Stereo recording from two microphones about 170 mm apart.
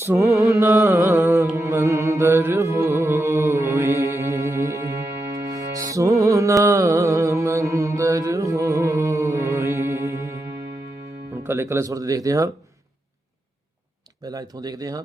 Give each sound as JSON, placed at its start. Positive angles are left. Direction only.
{"t": 0.0, "sound": "mantra", "side_deg": -15}
{"t": 0.3, "sound": "music", "side_deg": -20}
{"t": 11.4, "sound": "speech", "side_deg": -15}
{"t": 14.3, "sound": "speech", "side_deg": -20}